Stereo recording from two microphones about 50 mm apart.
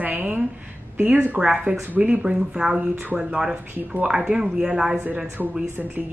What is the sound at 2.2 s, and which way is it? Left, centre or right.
Speech, centre.